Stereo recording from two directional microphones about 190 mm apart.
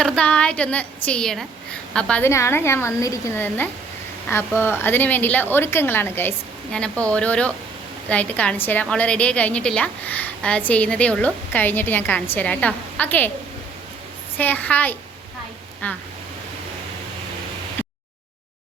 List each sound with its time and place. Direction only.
0.0 s a woman's voice: 5° left (ahead or behind)
14.3 s a woman's voice: 10° left (ahead or behind)
17.8 s a sound: 10° left (ahead or behind)